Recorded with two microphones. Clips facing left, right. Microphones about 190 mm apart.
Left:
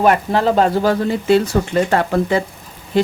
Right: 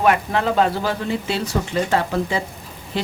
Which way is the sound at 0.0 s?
35° left (ahead or behind).